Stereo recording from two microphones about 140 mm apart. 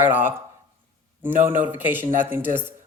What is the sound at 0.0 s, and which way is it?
Speech, 15° right (ahead or behind).